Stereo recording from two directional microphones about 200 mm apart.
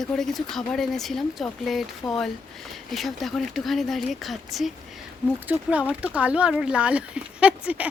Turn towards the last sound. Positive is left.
turn(degrees=-5)  # may be behind; listen again after turning